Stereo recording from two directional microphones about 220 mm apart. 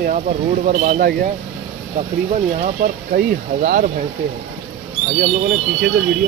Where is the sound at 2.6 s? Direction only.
40° right (ahead or behind).